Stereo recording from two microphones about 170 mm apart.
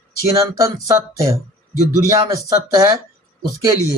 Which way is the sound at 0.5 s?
20° right (ahead or behind).